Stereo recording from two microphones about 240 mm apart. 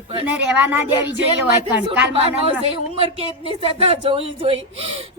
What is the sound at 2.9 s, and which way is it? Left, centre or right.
Speech, right.